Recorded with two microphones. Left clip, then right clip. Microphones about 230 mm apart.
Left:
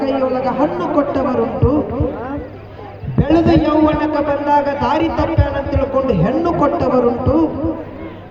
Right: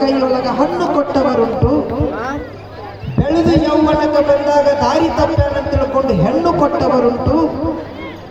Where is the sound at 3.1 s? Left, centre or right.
Right.